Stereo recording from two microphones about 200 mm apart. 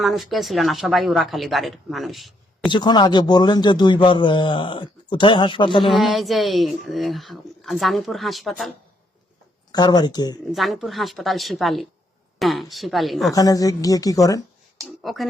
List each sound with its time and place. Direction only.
0.0 s speech: centre (ahead or behind)
2.7 s a man's voice: 20° left (ahead or behind)
5.9 s speech: centre (ahead or behind)
9.7 s a man's voice: 20° left (ahead or behind)
10.4 s speech: centre (ahead or behind)
13.3 s speech: 20° left (ahead or behind)
14.8 s speech: centre (ahead or behind)